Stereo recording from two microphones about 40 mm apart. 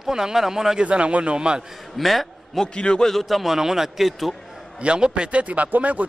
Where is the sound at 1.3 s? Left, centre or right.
Right.